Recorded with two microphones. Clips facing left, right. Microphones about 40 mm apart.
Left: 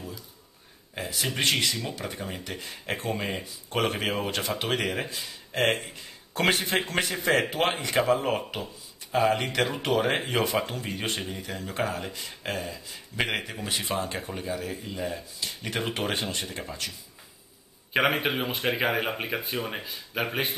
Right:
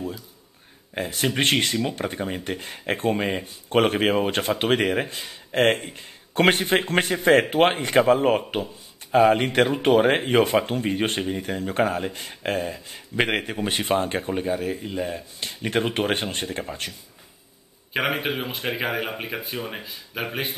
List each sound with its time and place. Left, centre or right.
0.9 s speech: right
3.1 s speech: right
3.4 s speech: right
17.9 s speech: centre